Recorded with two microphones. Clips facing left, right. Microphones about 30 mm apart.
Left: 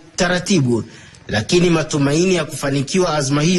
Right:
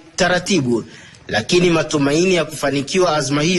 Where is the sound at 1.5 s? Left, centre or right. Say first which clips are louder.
Even; right.